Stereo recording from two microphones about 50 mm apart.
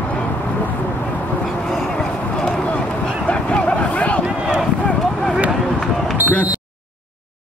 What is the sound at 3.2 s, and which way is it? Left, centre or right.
Vehicle, left.